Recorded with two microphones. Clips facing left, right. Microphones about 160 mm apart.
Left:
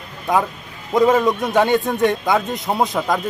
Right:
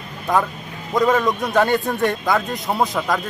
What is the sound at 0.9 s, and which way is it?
Speech, centre (ahead or behind).